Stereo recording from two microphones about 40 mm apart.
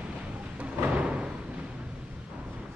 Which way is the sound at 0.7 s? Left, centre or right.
Right.